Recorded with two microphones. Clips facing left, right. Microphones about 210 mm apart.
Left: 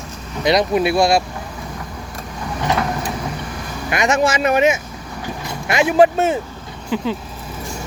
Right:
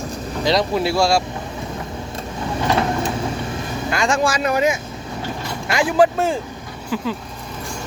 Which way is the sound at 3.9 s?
20° left (ahead or behind).